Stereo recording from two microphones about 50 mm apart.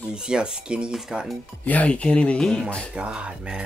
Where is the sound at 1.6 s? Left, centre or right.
Left.